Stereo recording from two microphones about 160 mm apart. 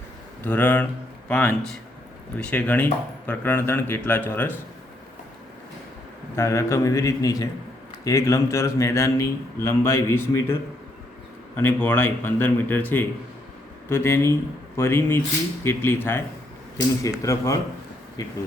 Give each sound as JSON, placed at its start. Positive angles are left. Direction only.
{"t": 0.4, "sound": "speech", "side_deg": 10}
{"t": 6.3, "sound": "speech", "side_deg": 15}
{"t": 11.5, "sound": "speech", "side_deg": 10}